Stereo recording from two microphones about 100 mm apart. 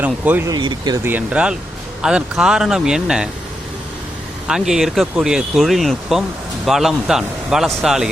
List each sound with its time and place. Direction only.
0.0 s speech: 15° right (ahead or behind)
0.4 s speech: 45° right (ahead or behind)
1.0 s speech: 15° right (ahead or behind)
4.4 s speech: 5° right (ahead or behind)